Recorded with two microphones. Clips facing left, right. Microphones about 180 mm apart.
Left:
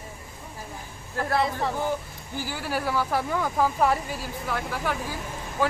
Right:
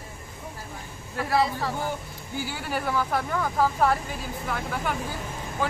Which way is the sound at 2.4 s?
Centre (ahead or behind).